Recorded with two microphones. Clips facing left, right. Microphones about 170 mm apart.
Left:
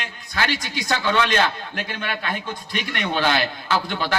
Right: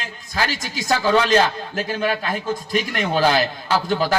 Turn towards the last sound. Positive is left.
turn(degrees=-40)  # may be behind; listen again after turning